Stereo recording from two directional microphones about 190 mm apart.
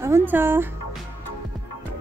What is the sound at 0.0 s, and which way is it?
Speech, 10° right (ahead or behind).